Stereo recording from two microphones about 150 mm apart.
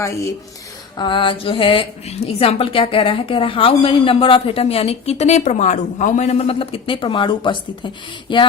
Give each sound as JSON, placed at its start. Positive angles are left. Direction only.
{"t": 0.9, "sound": "a woman's voice", "side_deg": 30}